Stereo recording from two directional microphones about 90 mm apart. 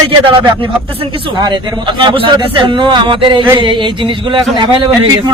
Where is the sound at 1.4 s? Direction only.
60° right (ahead or behind).